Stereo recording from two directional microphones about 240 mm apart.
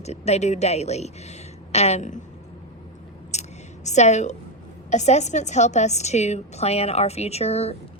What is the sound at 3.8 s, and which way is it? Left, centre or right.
A woman's voice, left.